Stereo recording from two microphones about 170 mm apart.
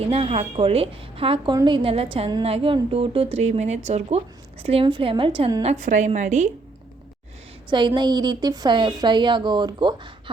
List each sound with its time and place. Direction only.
0.1 s a woman's voice: 35° right (ahead or behind)
5.6 s a woman's voice: 45° right (ahead or behind)
7.7 s a woman's voice: 25° right (ahead or behind)